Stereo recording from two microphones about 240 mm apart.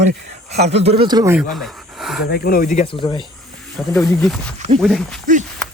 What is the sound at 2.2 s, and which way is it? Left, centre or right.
Speech, left.